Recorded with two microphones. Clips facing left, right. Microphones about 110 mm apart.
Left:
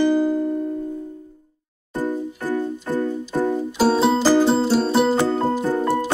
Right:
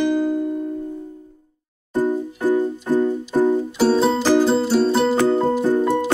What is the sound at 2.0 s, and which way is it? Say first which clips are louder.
Music: right 4 dB; 15° right (ahead or behind).